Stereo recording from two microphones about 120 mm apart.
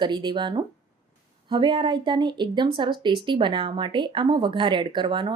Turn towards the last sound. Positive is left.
turn(degrees=-40)  # may be behind; listen again after turning